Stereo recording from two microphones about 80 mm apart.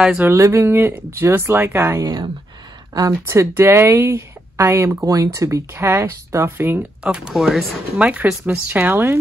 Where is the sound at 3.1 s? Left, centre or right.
Right.